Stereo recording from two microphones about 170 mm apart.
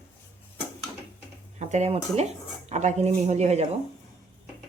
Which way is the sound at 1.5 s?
40° right (ahead or behind).